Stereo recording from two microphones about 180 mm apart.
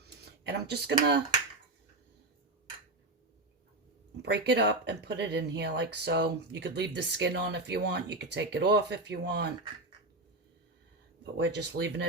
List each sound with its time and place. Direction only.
0.0 s a sound: 65° right (ahead or behind)
4.2 s speech: 70° right (ahead or behind)
11.2 s speech: 75° right (ahead or behind)